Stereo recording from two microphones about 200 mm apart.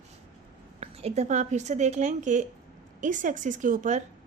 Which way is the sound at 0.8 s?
30° right (ahead or behind).